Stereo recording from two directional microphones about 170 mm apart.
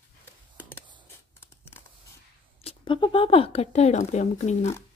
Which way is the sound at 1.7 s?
15° left (ahead or behind).